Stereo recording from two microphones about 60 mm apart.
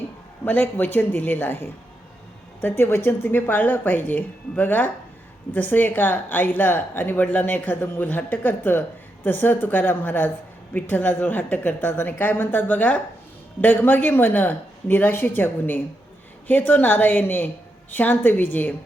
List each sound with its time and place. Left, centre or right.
0.4 s speech: left